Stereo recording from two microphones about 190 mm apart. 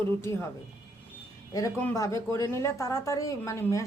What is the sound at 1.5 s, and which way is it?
Speech, 15° left (ahead or behind).